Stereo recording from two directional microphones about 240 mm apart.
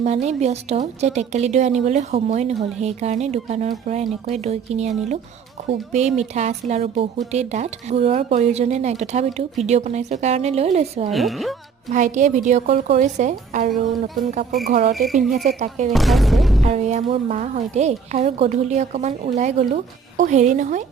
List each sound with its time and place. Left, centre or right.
0.0 s a woman's voice: right
11.1 s speech: centre
11.9 s a woman's voice: right
15.9 s speech: centre
16.6 s a woman's voice: right